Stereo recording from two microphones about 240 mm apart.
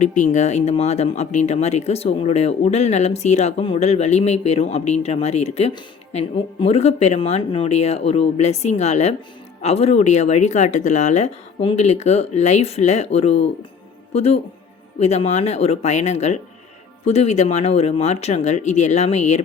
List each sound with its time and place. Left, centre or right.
0.0 s speech: left